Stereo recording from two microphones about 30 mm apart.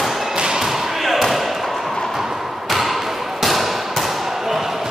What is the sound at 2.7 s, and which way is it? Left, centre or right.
Basketball bounce, centre.